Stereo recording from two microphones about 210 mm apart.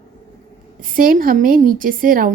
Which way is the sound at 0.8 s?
40° right (ahead or behind).